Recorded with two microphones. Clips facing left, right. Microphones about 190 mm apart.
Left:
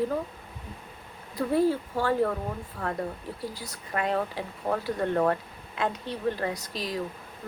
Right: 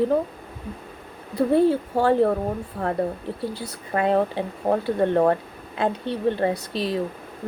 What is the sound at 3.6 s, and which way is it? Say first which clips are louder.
Speech: right 7 dB; 30° right (ahead or behind).